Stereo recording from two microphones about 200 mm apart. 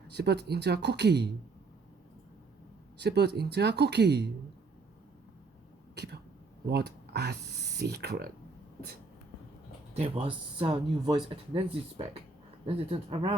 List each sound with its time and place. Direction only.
0.1 s speech: 55° right (ahead or behind)
3.0 s speech: 55° right (ahead or behind)
5.9 s a sound: 55° right (ahead or behind)
6.7 s speech: 55° right (ahead or behind)
9.9 s speech: 25° right (ahead or behind)